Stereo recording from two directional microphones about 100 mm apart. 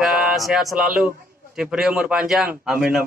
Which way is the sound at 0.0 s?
5° right (ahead or behind).